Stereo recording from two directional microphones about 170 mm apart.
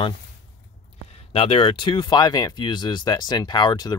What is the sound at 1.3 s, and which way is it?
Speech, 35° left (ahead or behind).